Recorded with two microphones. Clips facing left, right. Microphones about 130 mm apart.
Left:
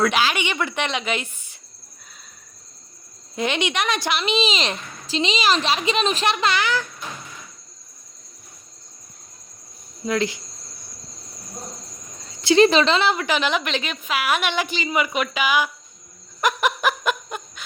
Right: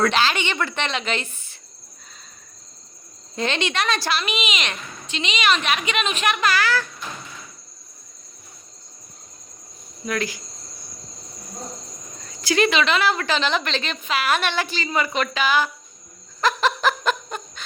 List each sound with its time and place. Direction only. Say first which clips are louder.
0.0 s a woman's voice: even; 10° left (ahead or behind)
3.3 s a woman's voice: left 1 dB; 15° left (ahead or behind)
10.1 s a woman's voice: left 3 dB; 25° left (ahead or behind)
12.3 s a woman's voice: left 5 dB; 25° left (ahead or behind)
16.4 s snicker: right 1 dB; 15° left (ahead or behind)